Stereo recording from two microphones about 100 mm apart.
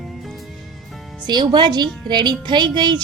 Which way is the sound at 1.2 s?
45° right (ahead or behind).